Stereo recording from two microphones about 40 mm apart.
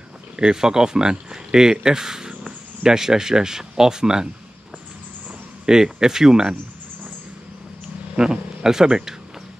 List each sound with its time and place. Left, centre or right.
0.4 s speech: centre
5.7 s speech: centre
8.2 s speech: centre